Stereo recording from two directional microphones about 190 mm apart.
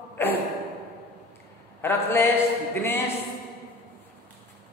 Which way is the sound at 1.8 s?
10° left (ahead or behind).